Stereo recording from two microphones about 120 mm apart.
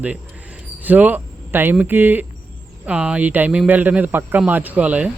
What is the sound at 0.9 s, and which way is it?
Speech, 15° right (ahead or behind).